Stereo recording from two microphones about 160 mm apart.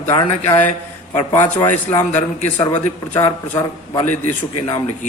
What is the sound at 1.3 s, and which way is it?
A man's voice, 20° left (ahead or behind).